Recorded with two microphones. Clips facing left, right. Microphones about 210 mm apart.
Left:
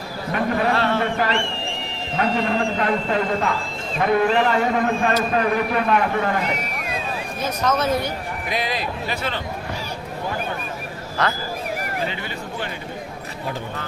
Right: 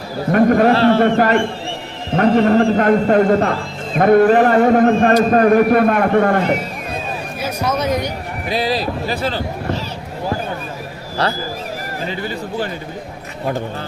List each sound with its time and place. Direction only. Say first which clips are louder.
0.3 s a man's voice: right 10 dB; 50° right (ahead or behind)
0.7 s speech: right 8 dB; 35° right (ahead or behind)
1.0 s a man's voice: right 8 dB; 55° right (ahead or behind)
7.4 s speech: right 2 dB; 10° right (ahead or behind)
8.4 s speech: right 7 dB; 35° right (ahead or behind)
11.2 s speech: right 3 dB; 30° right (ahead or behind)